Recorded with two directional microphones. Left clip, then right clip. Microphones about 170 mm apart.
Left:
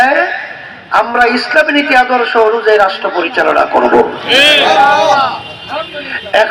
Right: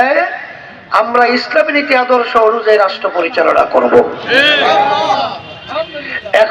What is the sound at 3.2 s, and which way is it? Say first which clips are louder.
A man's voice: even; 35° right (ahead or behind).